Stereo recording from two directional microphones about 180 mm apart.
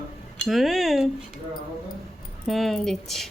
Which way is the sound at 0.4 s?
Centre (ahead or behind).